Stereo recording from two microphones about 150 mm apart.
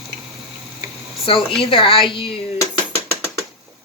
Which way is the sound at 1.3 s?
35° left (ahead or behind).